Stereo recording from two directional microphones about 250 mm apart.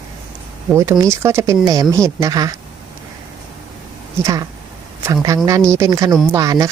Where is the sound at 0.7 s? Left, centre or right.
Centre.